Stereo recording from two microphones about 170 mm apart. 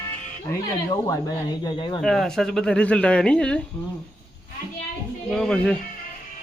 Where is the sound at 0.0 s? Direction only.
15° left (ahead or behind).